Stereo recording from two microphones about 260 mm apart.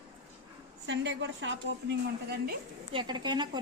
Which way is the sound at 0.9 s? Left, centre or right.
Right.